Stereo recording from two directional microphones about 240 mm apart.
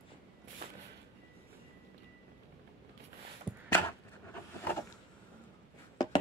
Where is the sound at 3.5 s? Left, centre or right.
Centre.